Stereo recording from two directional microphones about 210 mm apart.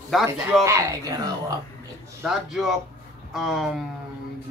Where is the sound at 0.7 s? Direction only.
15° right (ahead or behind).